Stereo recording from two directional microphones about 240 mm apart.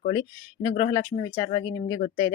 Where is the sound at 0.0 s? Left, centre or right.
Centre.